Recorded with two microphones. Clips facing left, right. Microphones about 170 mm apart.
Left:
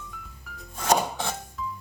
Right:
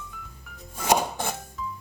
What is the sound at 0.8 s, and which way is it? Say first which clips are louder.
Music: even; 5° right (ahead or behind).